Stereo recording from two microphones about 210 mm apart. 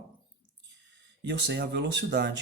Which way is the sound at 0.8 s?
60° right (ahead or behind).